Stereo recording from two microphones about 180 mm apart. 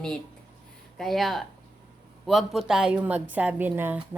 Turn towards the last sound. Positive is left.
turn(degrees=-10)  # may be behind; listen again after turning